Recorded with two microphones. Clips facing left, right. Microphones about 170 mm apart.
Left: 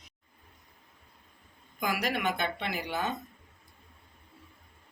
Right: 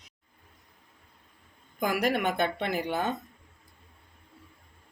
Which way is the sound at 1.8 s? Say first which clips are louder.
Right 4 dB; 50° right (ahead or behind).